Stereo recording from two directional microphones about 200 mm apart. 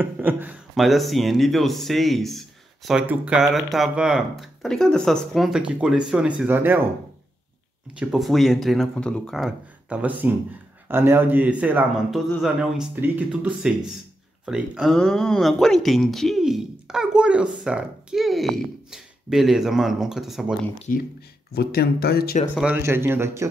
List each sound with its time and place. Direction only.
0.0 s speech: 10° right (ahead or behind)
8.0 s speech: centre (ahead or behind)
20.9 s speech: 45° left (ahead or behind)
22.5 s speech: centre (ahead or behind)
22.8 s speech: 10° right (ahead or behind)